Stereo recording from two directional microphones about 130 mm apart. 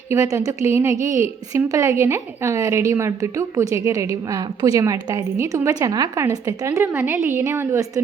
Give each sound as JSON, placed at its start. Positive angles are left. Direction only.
{"t": 0.1, "sound": "a woman's voice", "side_deg": -25}